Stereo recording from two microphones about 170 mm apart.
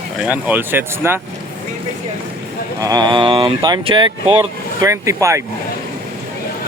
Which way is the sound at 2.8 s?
20° right (ahead or behind).